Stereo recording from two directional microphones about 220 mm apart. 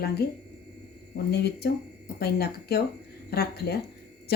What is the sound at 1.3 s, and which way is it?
Speech, 45° left (ahead or behind).